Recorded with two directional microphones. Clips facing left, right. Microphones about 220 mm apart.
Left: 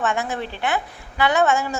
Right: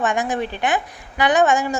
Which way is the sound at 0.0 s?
15° right (ahead or behind).